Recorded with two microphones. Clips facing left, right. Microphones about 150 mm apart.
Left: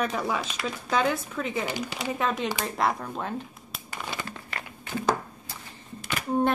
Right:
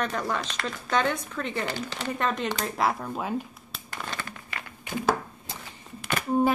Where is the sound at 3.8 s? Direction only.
10° left (ahead or behind).